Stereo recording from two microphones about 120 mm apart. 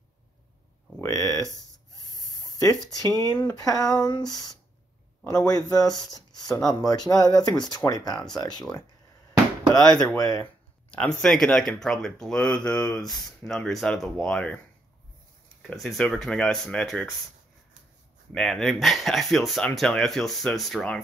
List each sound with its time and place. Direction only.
1.0 s speech: 25° left (ahead or behind)
2.0 s a sound: 35° left (ahead or behind)
3.5 s speech: 30° left (ahead or behind)
5.2 s a man's voice: 10° left (ahead or behind)
5.5 s speech: 30° left (ahead or behind)
9.8 s speech: 5° left (ahead or behind)
10.1 s speech: 30° left (ahead or behind)
10.4 s speech: 10° left (ahead or behind)
15.6 s speech: centre (ahead or behind)
18.3 s speech: 5° left (ahead or behind)